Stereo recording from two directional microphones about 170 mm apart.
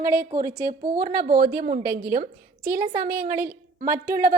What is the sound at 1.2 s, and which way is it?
A woman's voice, 55° right (ahead or behind).